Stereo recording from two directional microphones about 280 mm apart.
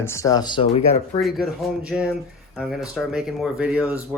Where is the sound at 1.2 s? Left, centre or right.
Centre.